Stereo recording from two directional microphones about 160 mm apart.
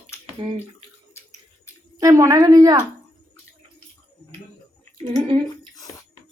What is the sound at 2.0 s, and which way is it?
Speech, 20° right (ahead or behind).